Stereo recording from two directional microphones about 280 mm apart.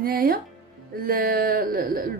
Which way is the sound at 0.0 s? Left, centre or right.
Right.